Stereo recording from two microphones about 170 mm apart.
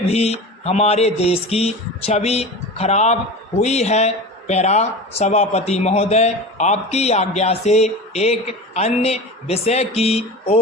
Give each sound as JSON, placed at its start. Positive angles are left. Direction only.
{"t": 0.1, "sound": "speech", "side_deg": 35}